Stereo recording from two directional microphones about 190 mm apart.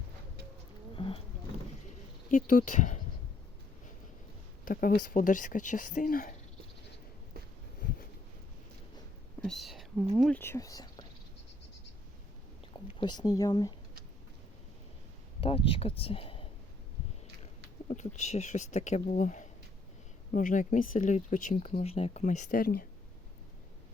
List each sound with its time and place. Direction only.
0.9 s a sound: 30° left (ahead or behind)
2.3 s speech: 45° left (ahead or behind)
4.6 s speech: 50° left (ahead or behind)
9.4 s speech: centre (ahead or behind); by 11.0 s 20° left (ahead or behind)
13.0 s speech: 20° left (ahead or behind)
15.4 s speech: 30° left (ahead or behind)
17.8 s speech: 40° left (ahead or behind)